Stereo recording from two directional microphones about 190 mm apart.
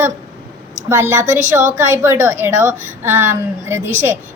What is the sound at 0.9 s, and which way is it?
A woman's voice, 15° right (ahead or behind).